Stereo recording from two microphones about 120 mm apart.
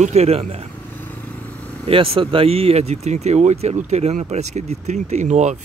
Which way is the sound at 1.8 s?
55° right (ahead or behind).